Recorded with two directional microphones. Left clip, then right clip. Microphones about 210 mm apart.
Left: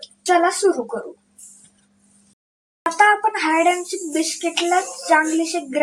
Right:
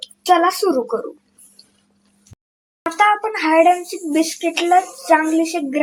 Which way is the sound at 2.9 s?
20° right (ahead or behind).